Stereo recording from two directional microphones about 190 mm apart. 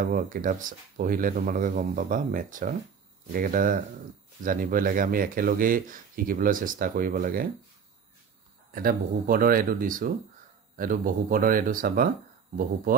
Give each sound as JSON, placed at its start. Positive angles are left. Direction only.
{"t": 0.0, "sound": "speech", "side_deg": -45}
{"t": 8.7, "sound": "speech", "side_deg": -50}